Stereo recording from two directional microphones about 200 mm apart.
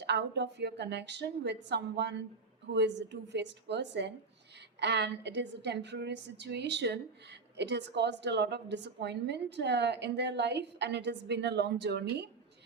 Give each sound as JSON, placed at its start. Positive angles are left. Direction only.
{"t": 0.0, "sound": "a woman's voice", "side_deg": -60}